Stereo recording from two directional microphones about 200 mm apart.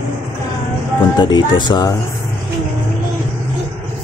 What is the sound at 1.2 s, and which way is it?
Speech, 20° left (ahead or behind).